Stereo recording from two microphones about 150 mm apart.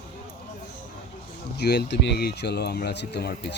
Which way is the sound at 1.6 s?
90° left.